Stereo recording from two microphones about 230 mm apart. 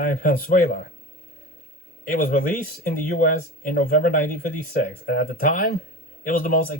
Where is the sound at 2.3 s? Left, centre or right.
Left.